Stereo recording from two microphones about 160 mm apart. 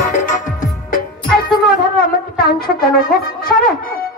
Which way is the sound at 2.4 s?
70° left (ahead or behind).